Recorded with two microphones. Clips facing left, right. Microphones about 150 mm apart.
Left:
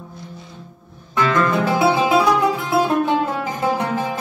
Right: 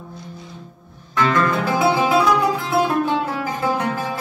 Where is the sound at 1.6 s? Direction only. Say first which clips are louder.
Left 1 dB; 20° left (ahead or behind).